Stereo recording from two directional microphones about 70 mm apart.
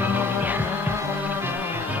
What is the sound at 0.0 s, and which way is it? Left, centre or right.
Music, right.